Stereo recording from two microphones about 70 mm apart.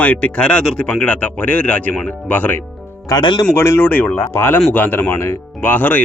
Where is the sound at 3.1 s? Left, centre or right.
Left.